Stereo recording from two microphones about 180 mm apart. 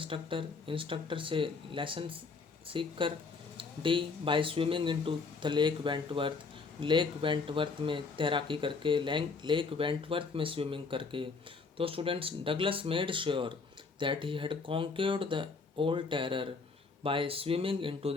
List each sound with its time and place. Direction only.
0.0 s speech: 30° right (ahead or behind)